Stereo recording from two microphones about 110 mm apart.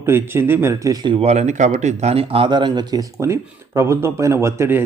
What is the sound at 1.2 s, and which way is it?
A man's voice, 85° right.